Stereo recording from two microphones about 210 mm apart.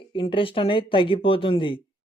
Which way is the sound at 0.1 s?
25° left (ahead or behind).